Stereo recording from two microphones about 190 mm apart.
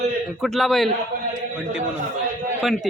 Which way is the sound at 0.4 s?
Centre (ahead or behind).